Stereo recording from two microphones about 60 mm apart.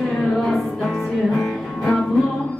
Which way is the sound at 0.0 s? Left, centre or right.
Centre.